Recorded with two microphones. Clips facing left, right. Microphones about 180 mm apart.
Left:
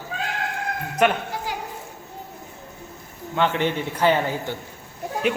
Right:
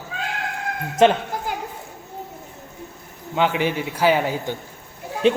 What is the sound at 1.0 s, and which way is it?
Speech, 25° right (ahead or behind).